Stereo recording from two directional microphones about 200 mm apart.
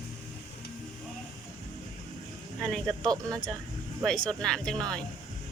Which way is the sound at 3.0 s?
20° right (ahead or behind).